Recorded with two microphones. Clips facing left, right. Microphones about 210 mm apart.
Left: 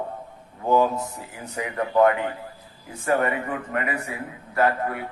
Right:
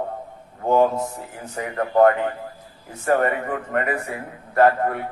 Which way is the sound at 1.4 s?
45° right (ahead or behind).